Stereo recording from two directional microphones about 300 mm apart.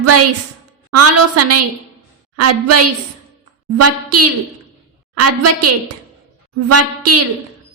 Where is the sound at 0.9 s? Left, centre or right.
Right.